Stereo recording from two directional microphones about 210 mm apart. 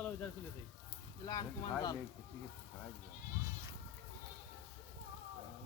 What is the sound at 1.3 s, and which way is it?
Speech, 20° left (ahead or behind).